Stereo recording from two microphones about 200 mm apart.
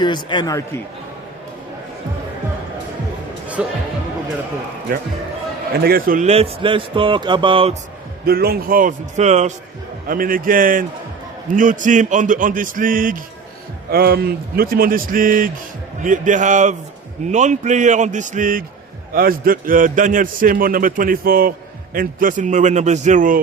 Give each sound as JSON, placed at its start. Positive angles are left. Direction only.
{"t": 0.0, "sound": "a man's voice", "side_deg": 20}
{"t": 3.6, "sound": "speech", "side_deg": -5}
{"t": 5.7, "sound": "a man's voice", "side_deg": -50}
{"t": 8.2, "sound": "a man's voice", "side_deg": -50}